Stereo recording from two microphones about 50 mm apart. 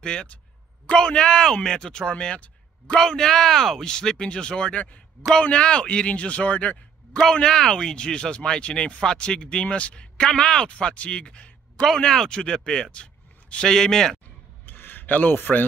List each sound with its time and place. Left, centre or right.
0.0 s speech: centre
3.0 s speech: centre; by 6.8 s left
7.3 s a man's voice: centre
14.7 s a sound: left